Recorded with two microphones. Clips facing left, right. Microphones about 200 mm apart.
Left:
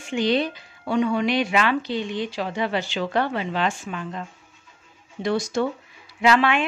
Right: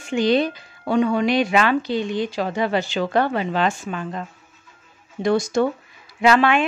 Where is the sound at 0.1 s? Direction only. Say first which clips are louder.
Right 3 dB; 45° right (ahead or behind).